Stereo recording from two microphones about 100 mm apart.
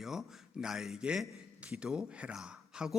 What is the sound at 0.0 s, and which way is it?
A man's voice, 5° right (ahead or behind).